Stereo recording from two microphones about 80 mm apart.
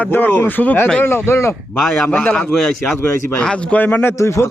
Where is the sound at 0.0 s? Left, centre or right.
Left.